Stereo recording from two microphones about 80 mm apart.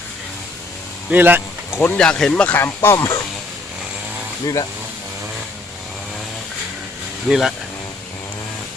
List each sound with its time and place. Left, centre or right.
1.1 s speech: right
1.7 s speech: left
2.0 s speech: centre
2.6 s speech: left
7.3 s speech: centre